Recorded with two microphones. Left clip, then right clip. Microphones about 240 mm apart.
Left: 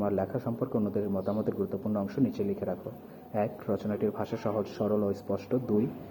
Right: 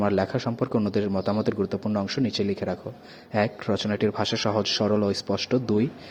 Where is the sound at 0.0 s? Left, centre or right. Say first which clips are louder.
Right 6 dB; right.